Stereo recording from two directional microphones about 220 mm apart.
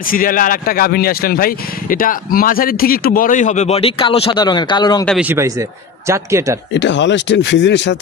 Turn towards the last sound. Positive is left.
turn(degrees=55)  # may be behind; listen again after turning